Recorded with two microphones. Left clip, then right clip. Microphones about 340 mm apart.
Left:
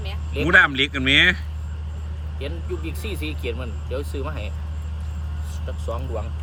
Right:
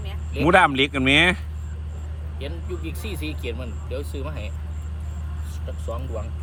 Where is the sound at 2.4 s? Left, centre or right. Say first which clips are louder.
Left 2 dB; centre.